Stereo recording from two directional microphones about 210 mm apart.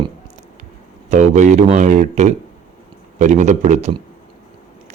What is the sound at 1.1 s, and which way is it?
Speech, 35° right (ahead or behind).